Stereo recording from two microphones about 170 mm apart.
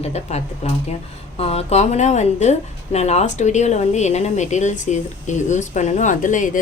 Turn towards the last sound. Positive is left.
turn(degrees=50)  # may be behind; listen again after turning